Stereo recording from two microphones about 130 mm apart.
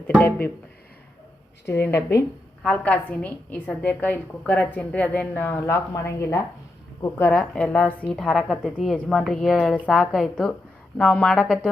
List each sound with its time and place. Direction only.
0.2 s a woman's voice: 15° left (ahead or behind)
1.6 s a woman's voice: 20° left (ahead or behind)
2.6 s a woman's voice: 10° left (ahead or behind)